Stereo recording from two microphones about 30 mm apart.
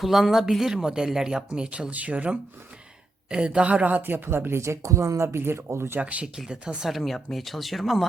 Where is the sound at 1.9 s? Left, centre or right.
Right.